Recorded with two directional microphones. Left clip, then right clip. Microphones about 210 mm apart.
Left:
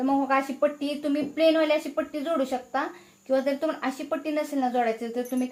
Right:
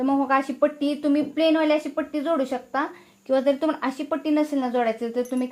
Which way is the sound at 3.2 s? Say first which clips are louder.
Right 4 dB; 40° right (ahead or behind).